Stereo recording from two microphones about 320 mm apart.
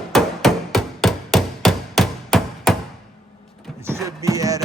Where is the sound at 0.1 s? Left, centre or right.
Centre.